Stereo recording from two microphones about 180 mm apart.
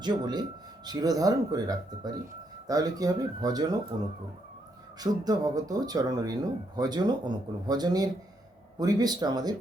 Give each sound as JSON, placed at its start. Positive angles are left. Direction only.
{"t": 0.0, "sound": "speech", "side_deg": -25}
{"t": 4.9, "sound": "speech", "side_deg": -20}